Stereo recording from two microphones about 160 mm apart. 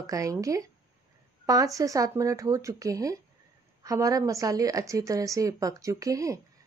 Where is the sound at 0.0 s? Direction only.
20° right (ahead or behind).